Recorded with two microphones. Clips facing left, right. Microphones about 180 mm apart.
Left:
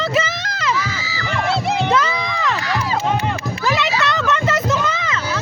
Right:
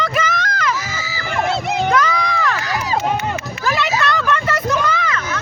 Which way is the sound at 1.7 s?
25° left (ahead or behind).